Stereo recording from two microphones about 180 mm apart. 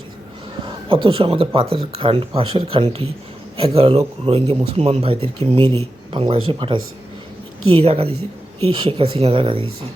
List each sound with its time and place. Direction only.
0.9 s speech: 30° right (ahead or behind)
7.8 s speech: 35° right (ahead or behind)